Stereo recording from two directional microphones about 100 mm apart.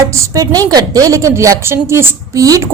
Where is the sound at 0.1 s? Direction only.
30° right (ahead or behind).